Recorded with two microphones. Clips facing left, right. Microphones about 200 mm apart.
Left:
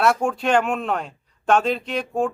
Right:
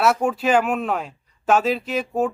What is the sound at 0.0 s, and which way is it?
Speech, 5° right (ahead or behind).